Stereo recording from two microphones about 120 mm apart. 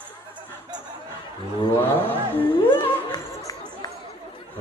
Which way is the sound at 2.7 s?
40° left (ahead or behind).